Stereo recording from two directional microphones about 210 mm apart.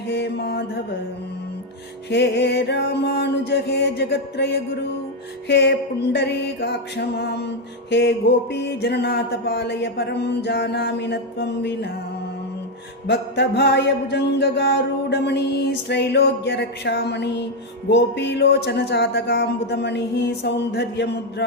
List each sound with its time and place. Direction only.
0.1 s mantra: 50° left (ahead or behind)
2.0 s music: 55° left (ahead or behind)
13.1 s music: 55° left (ahead or behind)